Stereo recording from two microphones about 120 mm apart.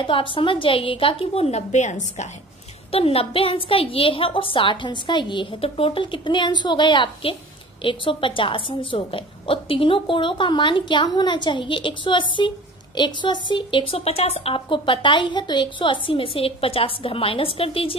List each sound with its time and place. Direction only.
0.0 s a woman's voice: 45° left (ahead or behind); by 2.2 s 80° left
2.9 s a woman's voice: 55° left (ahead or behind)